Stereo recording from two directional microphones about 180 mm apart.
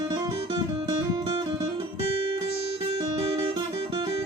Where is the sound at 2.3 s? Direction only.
30° right (ahead or behind).